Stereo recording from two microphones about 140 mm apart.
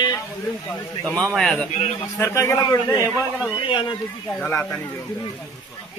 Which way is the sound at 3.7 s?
35° left (ahead or behind).